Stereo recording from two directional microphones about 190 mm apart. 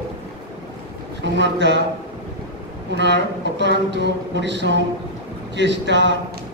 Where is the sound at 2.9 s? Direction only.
65° right (ahead or behind).